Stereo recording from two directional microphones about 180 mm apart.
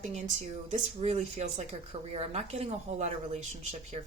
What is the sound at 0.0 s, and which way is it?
Speech, 35° right (ahead or behind).